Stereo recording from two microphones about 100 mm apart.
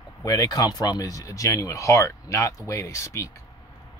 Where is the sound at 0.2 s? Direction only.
40° left (ahead or behind).